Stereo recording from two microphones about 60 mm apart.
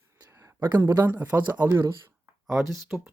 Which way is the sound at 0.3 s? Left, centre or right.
Right.